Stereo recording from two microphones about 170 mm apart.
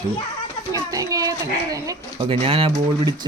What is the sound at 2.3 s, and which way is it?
Speech, 35° right (ahead or behind).